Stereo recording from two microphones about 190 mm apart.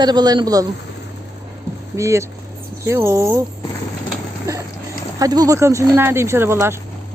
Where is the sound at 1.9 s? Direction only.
15° right (ahead or behind).